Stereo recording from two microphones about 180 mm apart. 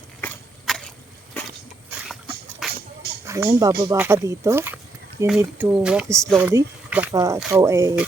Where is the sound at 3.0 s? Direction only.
60° right (ahead or behind).